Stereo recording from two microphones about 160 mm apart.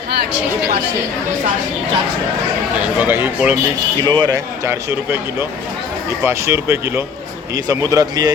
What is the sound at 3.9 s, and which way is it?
Speech, 25° right (ahead or behind).